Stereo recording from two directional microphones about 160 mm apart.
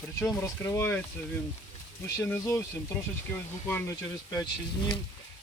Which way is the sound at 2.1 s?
20° left (ahead or behind).